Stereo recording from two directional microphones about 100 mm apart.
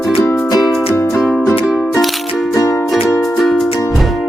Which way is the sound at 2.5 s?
25° left (ahead or behind).